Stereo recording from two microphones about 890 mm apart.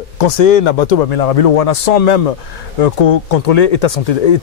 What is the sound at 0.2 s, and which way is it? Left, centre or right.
Speech, left.